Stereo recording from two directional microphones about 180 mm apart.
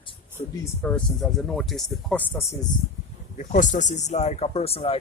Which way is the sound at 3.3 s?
45° left (ahead or behind).